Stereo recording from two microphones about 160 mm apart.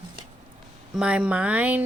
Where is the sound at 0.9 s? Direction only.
5° right (ahead or behind).